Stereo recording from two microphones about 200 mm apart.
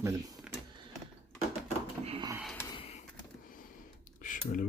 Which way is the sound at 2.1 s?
25° right (ahead or behind).